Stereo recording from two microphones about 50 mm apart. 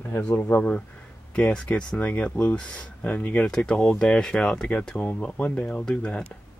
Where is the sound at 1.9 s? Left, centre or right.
Left.